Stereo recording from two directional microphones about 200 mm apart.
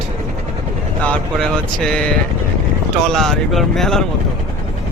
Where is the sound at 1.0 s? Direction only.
5° left (ahead or behind).